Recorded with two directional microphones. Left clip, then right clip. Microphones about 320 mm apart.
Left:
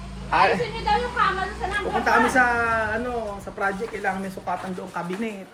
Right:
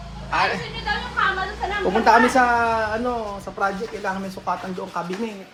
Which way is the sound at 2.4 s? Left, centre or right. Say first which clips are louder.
Right 2 dB; centre.